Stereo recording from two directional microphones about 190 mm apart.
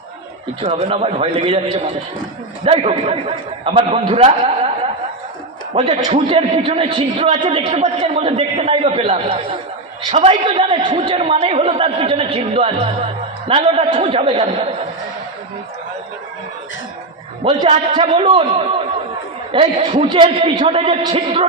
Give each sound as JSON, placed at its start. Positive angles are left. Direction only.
{"t": 0.6, "sound": "a man's voice", "side_deg": -30}
{"t": 2.6, "sound": "a man's voice", "side_deg": -30}
{"t": 5.9, "sound": "a man's voice", "side_deg": -25}
{"t": 17.6, "sound": "a man's voice", "side_deg": -25}
{"t": 19.5, "sound": "a man's voice", "side_deg": -30}